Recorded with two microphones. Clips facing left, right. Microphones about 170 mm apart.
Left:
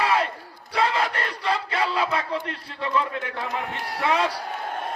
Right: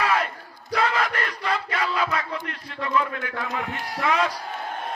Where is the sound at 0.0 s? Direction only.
30° left (ahead or behind).